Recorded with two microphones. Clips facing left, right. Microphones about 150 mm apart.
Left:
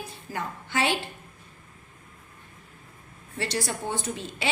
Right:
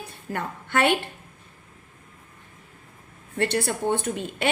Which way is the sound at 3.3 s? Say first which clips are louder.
Right 5 dB; 55° right (ahead or behind).